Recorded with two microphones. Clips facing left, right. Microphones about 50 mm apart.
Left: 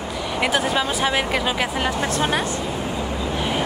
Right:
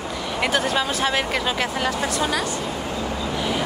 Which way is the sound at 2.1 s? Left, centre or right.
Left.